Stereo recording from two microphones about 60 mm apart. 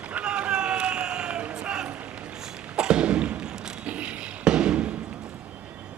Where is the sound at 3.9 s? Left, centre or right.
Centre.